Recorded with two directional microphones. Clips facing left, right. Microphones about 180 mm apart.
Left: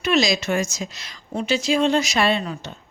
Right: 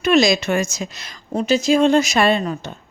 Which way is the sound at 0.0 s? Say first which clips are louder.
Right 5 dB; 50° right (ahead or behind).